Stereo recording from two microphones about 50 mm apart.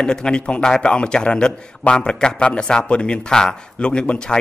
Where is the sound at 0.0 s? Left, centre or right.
Centre.